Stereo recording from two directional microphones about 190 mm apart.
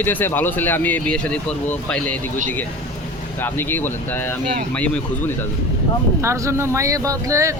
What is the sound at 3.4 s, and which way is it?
Speech, 10° left (ahead or behind).